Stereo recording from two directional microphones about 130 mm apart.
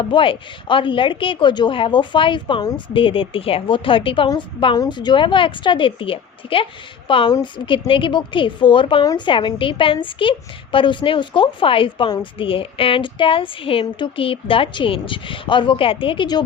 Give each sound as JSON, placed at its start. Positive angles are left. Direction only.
{"t": 0.0, "sound": "a woman's voice", "side_deg": 40}